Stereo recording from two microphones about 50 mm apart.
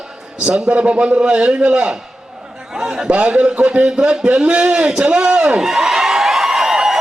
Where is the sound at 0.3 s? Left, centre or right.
Centre.